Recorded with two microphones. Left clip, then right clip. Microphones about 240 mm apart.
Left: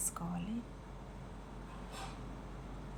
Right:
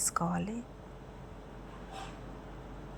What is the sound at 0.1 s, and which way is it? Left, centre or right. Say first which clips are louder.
Speech: right 12 dB; right.